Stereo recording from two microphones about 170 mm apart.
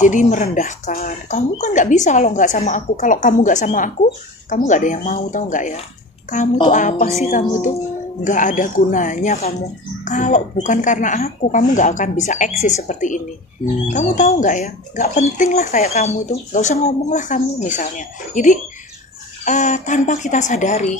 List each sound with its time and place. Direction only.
0.0 s speech: 50° left (ahead or behind)